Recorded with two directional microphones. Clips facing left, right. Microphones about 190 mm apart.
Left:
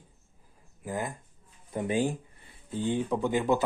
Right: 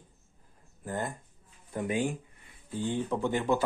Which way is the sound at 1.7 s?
30° left (ahead or behind).